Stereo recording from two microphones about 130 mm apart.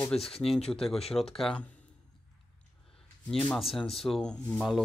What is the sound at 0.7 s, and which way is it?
Speech, 5° left (ahead or behind).